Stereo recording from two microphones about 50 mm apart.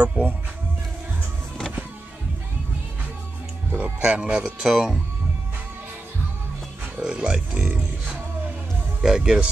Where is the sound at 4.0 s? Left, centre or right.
Right.